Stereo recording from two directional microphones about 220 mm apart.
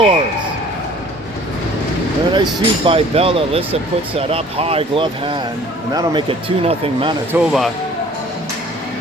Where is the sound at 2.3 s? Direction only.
20° right (ahead or behind).